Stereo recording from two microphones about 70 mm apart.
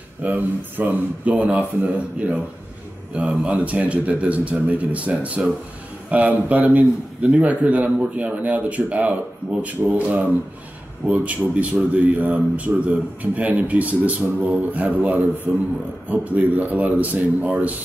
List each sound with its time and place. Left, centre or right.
0.2 s a man's voice: right